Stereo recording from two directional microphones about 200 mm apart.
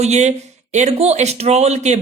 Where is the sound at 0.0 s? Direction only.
35° right (ahead or behind).